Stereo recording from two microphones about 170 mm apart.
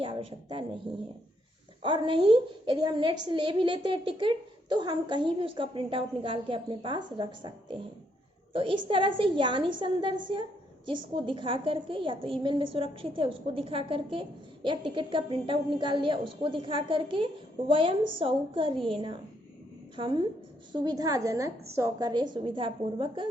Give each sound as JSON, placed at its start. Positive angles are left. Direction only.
{"t": 0.0, "sound": "a woman's voice", "side_deg": -30}
{"t": 1.8, "sound": "a woman's voice", "side_deg": -30}